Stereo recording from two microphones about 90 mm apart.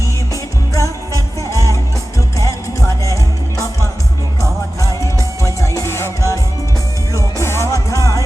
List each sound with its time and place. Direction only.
0.7 s music: 35° left (ahead or behind)
4.8 s music: 35° left (ahead or behind)